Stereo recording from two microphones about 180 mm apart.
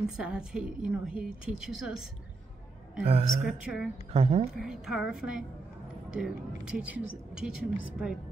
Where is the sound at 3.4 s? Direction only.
5° right (ahead or behind).